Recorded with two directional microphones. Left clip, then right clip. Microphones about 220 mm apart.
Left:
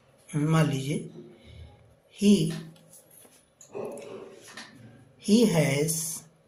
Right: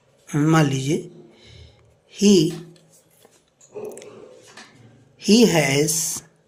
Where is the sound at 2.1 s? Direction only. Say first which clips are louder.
Right 8 dB; 50° right (ahead or behind).